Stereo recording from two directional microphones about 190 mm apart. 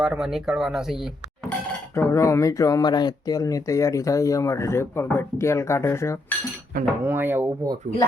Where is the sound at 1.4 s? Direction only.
10° left (ahead or behind).